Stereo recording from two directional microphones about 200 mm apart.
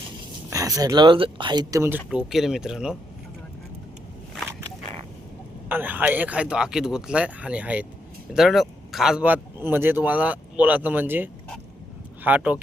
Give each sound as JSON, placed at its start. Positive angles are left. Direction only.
{"t": 0.5, "sound": "speech", "side_deg": -15}
{"t": 5.6, "sound": "speech", "side_deg": -10}